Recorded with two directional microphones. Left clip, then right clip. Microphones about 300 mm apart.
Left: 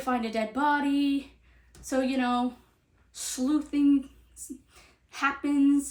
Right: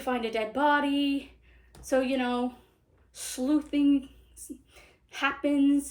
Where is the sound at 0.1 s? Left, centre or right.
Left.